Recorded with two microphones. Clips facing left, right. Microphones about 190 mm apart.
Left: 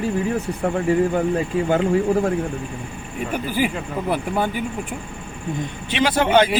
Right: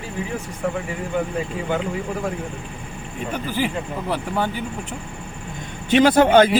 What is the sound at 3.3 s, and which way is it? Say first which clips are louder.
Speech: left 2 dB; 10° left (ahead or behind).